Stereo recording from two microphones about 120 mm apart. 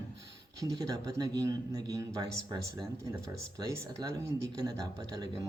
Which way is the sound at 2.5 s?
40° right (ahead or behind).